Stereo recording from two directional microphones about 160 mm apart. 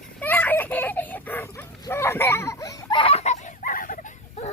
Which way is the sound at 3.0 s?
40° left (ahead or behind).